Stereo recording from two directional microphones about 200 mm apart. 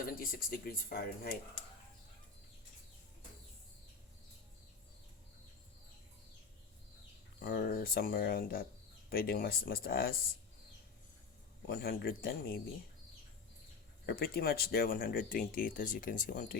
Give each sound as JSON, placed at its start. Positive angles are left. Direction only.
{"t": 0.0, "sound": "speech", "side_deg": 45}
{"t": 7.3, "sound": "speech", "side_deg": 50}
{"t": 11.6, "sound": "speech", "side_deg": 50}
{"t": 14.1, "sound": "speech", "side_deg": 50}